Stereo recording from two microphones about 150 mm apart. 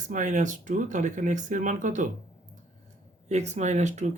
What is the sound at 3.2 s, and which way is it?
Speech, 50° right (ahead or behind).